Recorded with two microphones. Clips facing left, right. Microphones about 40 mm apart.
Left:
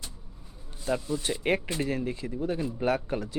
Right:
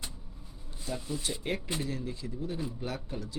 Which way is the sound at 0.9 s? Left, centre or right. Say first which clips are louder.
Left 7 dB; left.